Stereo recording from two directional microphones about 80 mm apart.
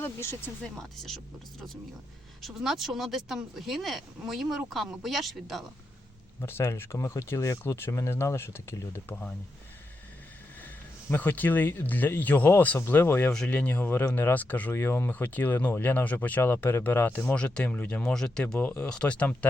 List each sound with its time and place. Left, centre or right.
0.0 s speech: left
0.6 s speech: centre
2.4 s speech: centre
6.4 s speech: left
9.0 s speech: left
11.1 s speech: left
13.3 s speech: centre
13.6 s speech: left
14.7 s speech: left; by 18.6 s centre
18.6 s speech: left